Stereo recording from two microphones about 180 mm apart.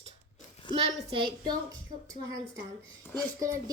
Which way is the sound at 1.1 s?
25° right (ahead or behind).